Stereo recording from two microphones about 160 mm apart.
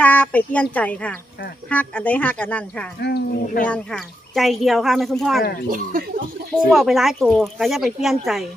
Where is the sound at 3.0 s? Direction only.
85° left; by 3.7 s 70° left (ahead or behind).